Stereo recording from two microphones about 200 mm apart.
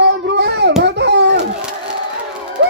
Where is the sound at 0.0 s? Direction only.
60° right (ahead or behind).